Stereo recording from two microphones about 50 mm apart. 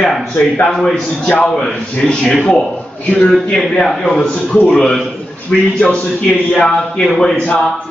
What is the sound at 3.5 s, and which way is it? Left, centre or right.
Speech, centre.